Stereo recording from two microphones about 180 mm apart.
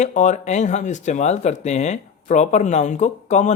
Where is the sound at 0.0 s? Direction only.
45° left (ahead or behind).